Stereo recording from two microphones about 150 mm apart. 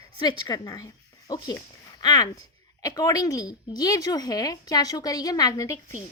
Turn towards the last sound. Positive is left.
turn(degrees=25)  # may be behind; listen again after turning